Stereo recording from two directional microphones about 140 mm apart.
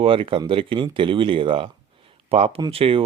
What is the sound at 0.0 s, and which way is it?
Speech, 40° right (ahead or behind).